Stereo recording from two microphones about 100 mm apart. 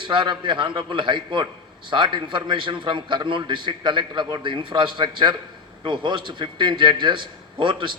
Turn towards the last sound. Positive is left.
turn(degrees=-55)  # may be behind; listen again after turning